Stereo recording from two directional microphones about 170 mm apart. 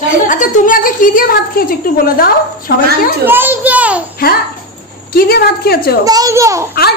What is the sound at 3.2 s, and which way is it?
Speech, 10° right (ahead or behind).